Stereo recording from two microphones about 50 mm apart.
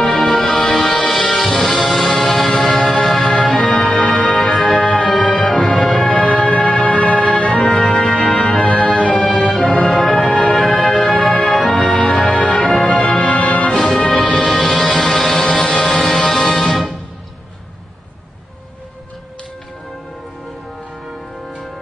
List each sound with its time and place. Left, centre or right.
0.0 s music: centre
4.7 s music: centre
6.1 s music: left; by 11.8 s centre
11.8 s music: centre
13.3 s music: left
13.7 s music: centre